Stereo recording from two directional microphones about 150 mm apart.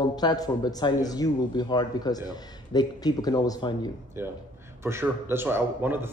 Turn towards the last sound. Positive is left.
turn(degrees=-15)  # may be behind; listen again after turning